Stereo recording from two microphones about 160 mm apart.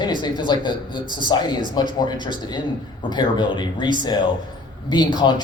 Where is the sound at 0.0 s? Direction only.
25° left (ahead or behind).